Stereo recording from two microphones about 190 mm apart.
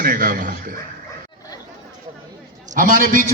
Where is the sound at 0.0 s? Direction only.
45° right (ahead or behind).